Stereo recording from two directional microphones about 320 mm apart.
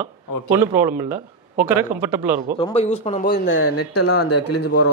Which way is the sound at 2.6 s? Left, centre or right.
Left.